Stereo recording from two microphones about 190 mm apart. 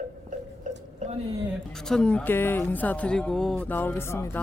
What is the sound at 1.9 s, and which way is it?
Speech, 5° left (ahead or behind).